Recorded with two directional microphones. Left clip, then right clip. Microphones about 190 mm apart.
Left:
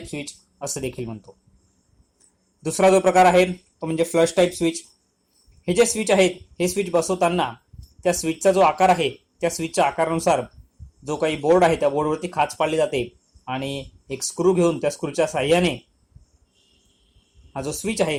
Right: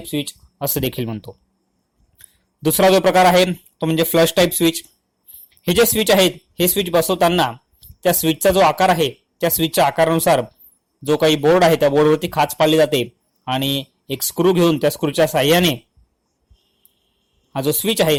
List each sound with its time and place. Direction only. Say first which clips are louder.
0.1 s speech: right 11 dB; 50° right (ahead or behind)
17.5 s speech: right 8 dB; 50° right (ahead or behind)